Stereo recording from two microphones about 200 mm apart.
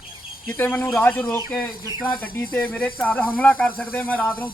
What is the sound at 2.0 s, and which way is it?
Speech, 45° left (ahead or behind).